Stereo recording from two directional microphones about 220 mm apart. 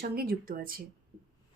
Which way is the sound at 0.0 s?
45° right (ahead or behind).